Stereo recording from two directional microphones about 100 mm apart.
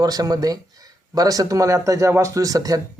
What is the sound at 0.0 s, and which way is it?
Speech, 40° right (ahead or behind).